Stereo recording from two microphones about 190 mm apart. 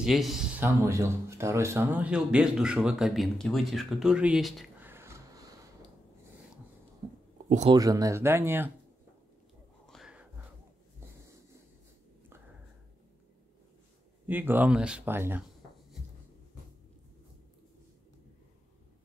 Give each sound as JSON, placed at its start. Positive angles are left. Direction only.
{"t": 0.0, "sound": "speech", "side_deg": 0}
{"t": 0.7, "sound": "speech", "side_deg": -15}
{"t": 4.8, "sound": "a sound", "side_deg": -15}
{"t": 7.4, "sound": "speech", "side_deg": -35}
{"t": 7.7, "sound": "speech", "side_deg": -20}
{"t": 9.8, "sound": "a sound", "side_deg": 0}
{"t": 14.2, "sound": "speech", "side_deg": -10}